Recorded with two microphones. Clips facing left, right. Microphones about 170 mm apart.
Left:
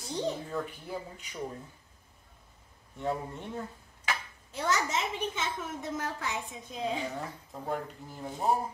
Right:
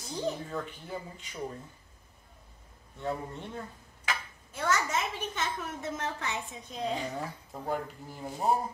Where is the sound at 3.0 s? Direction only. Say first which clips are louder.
Left 1 dB; 10° left (ahead or behind).